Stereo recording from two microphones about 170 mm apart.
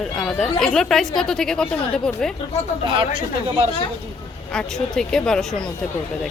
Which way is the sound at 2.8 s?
30° right (ahead or behind).